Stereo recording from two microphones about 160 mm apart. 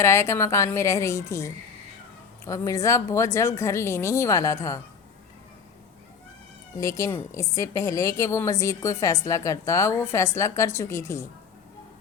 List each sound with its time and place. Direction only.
0.0 s a woman's voice: 15° left (ahead or behind)
6.7 s a woman's voice: 20° left (ahead or behind)